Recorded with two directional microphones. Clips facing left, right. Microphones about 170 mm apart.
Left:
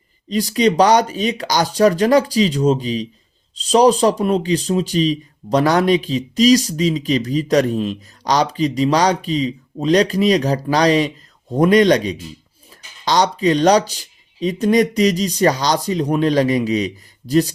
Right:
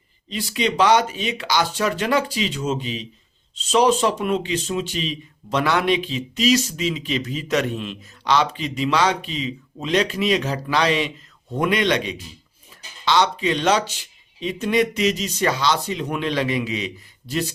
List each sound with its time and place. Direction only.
0.3 s speech: 40° left (ahead or behind)
12.7 s a sound: 40° left (ahead or behind)
13.1 s speech: 40° left (ahead or behind)